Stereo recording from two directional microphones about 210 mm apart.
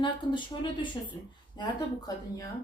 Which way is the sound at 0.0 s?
20° left (ahead or behind).